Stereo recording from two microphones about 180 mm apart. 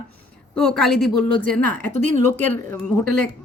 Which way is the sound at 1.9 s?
45° right (ahead or behind).